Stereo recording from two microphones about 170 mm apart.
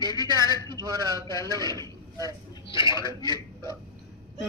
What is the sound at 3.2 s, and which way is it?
Speech, 20° left (ahead or behind).